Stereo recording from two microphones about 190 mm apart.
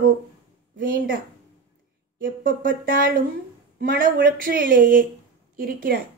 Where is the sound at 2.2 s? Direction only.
45° right (ahead or behind).